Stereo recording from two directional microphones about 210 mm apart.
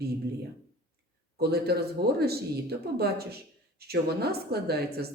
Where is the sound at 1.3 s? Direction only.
50° right (ahead or behind).